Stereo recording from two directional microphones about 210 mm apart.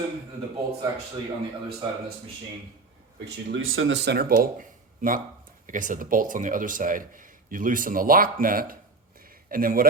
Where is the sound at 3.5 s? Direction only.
70° right (ahead or behind).